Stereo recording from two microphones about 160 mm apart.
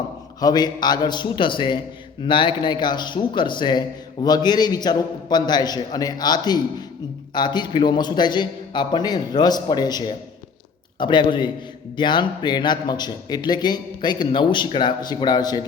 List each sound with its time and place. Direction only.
0.3 s speech: 25° left (ahead or behind)